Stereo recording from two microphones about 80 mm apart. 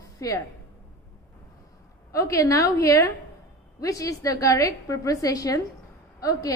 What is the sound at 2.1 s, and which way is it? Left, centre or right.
A woman's voice, left.